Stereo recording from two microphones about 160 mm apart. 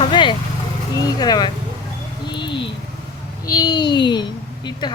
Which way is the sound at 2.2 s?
30° left (ahead or behind).